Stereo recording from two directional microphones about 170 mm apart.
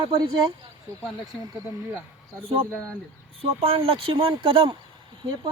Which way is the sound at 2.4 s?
35° right (ahead or behind).